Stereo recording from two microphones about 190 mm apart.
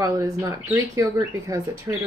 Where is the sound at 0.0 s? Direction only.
20° right (ahead or behind).